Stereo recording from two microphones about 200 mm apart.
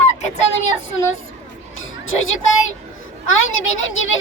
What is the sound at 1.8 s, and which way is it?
Chatter, 80° left.